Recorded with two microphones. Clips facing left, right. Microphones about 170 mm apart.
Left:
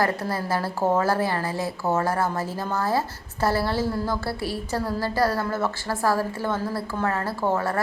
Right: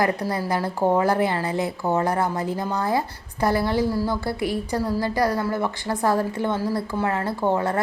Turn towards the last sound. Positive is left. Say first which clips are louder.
# right 2 dB
turn(degrees=-20)  # may be behind; listen again after turning